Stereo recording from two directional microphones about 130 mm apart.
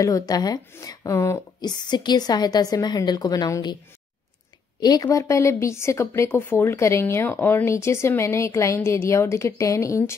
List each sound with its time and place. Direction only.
0.0 s a woman's voice: 25° left (ahead or behind)
1.6 s a woman's voice: 35° left (ahead or behind)
4.7 s a woman's voice: 30° left (ahead or behind)